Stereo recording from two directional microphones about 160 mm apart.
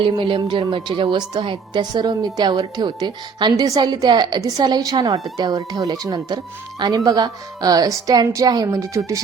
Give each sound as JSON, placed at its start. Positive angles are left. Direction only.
{"t": 0.0, "sound": "a woman's voice", "side_deg": -30}